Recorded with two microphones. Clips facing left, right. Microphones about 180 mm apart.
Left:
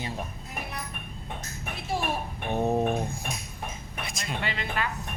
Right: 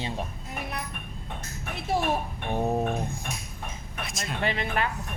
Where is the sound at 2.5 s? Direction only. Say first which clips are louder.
Left 1 dB; 5° right (ahead or behind).